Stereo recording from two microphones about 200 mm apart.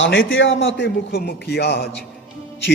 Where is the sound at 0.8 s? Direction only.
55° left (ahead or behind).